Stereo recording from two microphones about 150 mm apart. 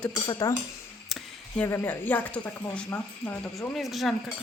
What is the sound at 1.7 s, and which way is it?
Speech, 15° left (ahead or behind).